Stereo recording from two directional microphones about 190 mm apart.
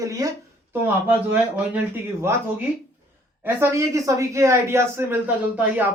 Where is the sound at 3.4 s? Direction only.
15° right (ahead or behind).